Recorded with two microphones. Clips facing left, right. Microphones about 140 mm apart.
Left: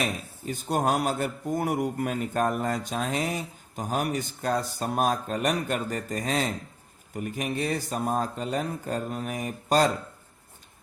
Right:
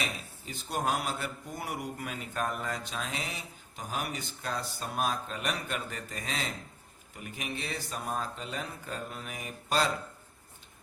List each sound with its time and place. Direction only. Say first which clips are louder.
0.0 s speech: left 7 dB; 45° left (ahead or behind)